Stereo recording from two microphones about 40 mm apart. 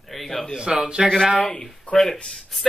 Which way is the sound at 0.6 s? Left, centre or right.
Centre.